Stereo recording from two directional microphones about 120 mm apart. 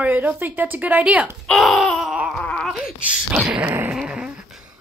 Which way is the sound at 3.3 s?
15° right (ahead or behind).